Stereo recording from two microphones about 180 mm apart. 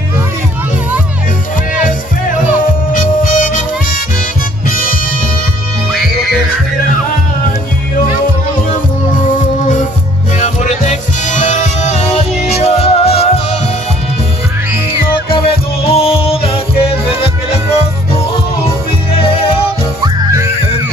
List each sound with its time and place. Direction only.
2.9 s music: 50° left (ahead or behind)
4.6 s music: 50° left (ahead or behind)
5.9 s music: centre (ahead or behind)
10.4 s music: 40° left (ahead or behind)
14.9 s music: 30° left (ahead or behind)
20.0 s music: 15° right (ahead or behind)